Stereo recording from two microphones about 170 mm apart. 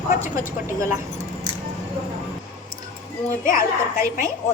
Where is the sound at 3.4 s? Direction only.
55° left (ahead or behind).